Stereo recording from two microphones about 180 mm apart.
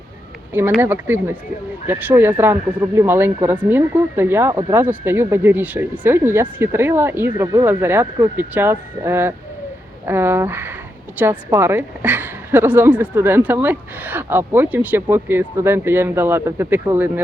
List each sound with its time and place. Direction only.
0.8 s a woman's voice: 10° right (ahead or behind)